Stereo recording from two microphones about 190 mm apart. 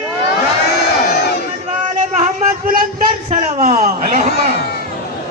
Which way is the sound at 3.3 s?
45° right (ahead or behind).